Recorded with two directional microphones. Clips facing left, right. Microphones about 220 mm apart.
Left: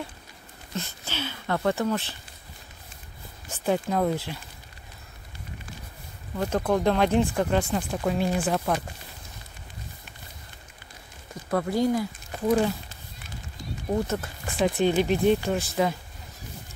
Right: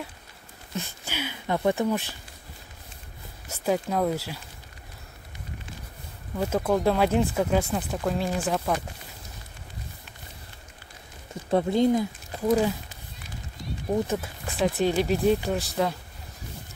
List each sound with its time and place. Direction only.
0.7 s speech: 10° right (ahead or behind)
3.4 s speech: 5° right (ahead or behind)
6.3 s speech: 5° right (ahead or behind)
11.5 s speech: 20° right (ahead or behind)
12.4 s speech: centre (ahead or behind)
14.0 s speech: 5° right (ahead or behind)